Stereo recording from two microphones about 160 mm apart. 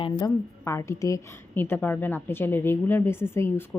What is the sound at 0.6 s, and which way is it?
A woman's voice, 15° left (ahead or behind).